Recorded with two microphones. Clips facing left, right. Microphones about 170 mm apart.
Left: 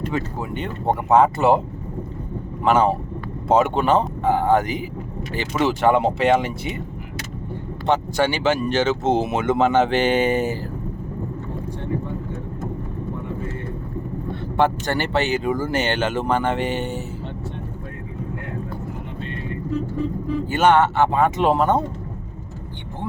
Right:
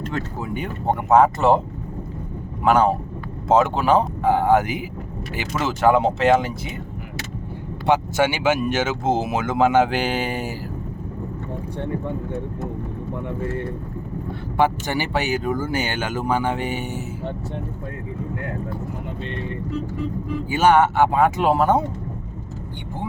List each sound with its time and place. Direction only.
1.1 s speech: centre (ahead or behind)
2.6 s speech: centre (ahead or behind)
7.9 s speech: 10° right (ahead or behind)
14.5 s speech: 10° right (ahead or behind)
20.5 s speech: 5° right (ahead or behind)